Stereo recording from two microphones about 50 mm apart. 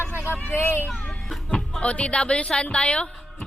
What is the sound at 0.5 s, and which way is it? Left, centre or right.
Speech, left.